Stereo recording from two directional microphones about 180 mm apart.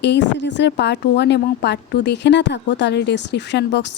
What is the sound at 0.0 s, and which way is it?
A woman's voice, 75° left (ahead or behind).